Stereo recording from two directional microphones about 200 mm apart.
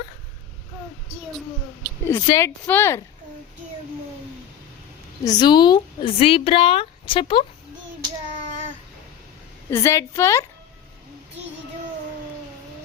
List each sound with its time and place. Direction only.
2.0 s speech: 15° left (ahead or behind)
5.2 s speech: 20° left (ahead or behind)
9.6 s speech: 15° left (ahead or behind)